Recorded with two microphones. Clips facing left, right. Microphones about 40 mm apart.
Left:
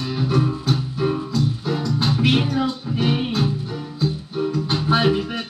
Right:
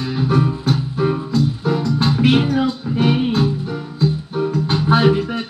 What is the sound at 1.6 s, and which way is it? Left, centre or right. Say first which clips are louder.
Music: right 4 dB; right.